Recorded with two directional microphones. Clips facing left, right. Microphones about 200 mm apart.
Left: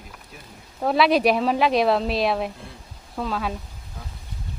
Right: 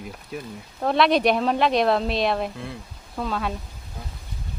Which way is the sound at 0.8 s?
5° left (ahead or behind).